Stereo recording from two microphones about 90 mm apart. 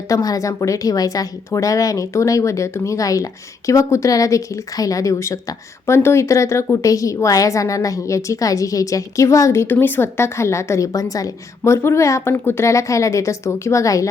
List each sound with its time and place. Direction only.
0.1 s a woman's voice: 40° left (ahead or behind)